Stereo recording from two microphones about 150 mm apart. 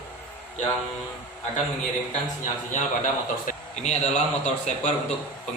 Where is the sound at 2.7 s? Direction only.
60° left (ahead or behind).